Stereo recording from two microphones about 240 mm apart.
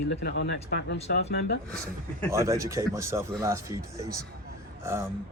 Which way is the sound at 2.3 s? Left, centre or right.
Centre.